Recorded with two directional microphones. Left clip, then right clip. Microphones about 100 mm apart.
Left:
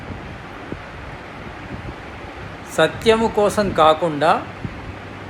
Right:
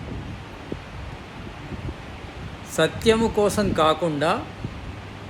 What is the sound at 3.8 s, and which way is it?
Speech, 20° right (ahead or behind).